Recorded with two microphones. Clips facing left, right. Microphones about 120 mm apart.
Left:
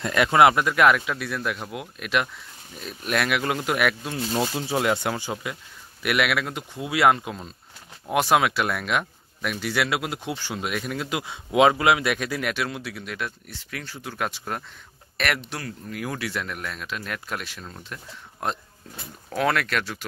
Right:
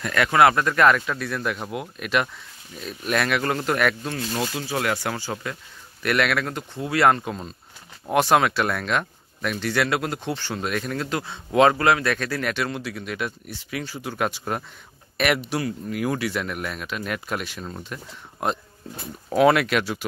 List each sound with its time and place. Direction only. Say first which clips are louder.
0.0 s speech: even; 20° left (ahead or behind)
4.4 s speech: left 3 dB; 25° left (ahead or behind); by 20.1 s 10° right (ahead or behind)